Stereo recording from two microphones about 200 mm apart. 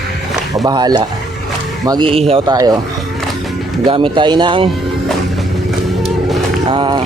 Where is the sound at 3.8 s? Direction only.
25° right (ahead or behind).